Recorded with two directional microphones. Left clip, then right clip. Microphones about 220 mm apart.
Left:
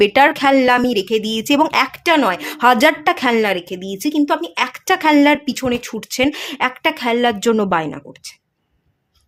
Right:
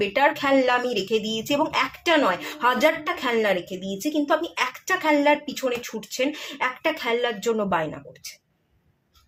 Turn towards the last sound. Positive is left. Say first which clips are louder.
# left 7 dB
turn(degrees=45)  # may be behind; listen again after turning